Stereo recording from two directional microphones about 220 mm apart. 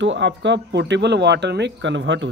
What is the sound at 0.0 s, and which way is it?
Speech, 55° right (ahead or behind).